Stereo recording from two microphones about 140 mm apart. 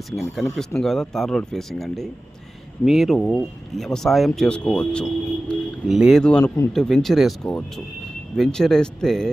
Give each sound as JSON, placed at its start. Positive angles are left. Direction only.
{"t": 0.1, "sound": "speech", "side_deg": 0}
{"t": 6.4, "sound": "a man's voice", "side_deg": 25}
{"t": 6.7, "sound": "speech", "side_deg": 0}